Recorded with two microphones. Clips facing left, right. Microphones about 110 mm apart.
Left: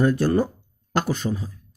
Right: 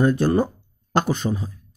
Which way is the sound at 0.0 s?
20° right (ahead or behind).